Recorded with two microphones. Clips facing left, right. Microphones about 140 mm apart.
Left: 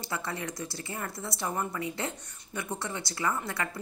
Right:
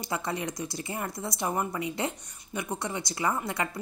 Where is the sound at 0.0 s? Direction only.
20° right (ahead or behind).